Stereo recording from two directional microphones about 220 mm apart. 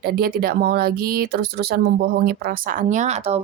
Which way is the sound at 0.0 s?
45° right (ahead or behind).